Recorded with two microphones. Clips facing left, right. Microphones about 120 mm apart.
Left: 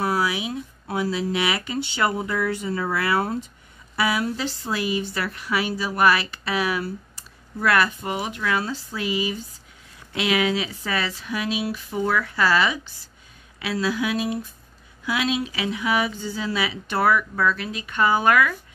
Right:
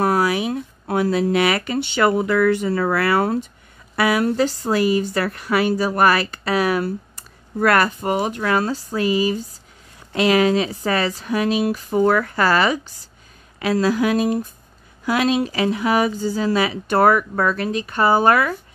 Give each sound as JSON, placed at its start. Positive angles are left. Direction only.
{"t": 0.0, "sound": "speech", "side_deg": -50}
{"t": 3.9, "sound": "a woman's voice", "side_deg": -55}